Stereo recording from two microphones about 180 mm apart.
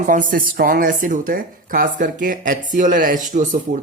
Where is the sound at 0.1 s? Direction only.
50° right (ahead or behind).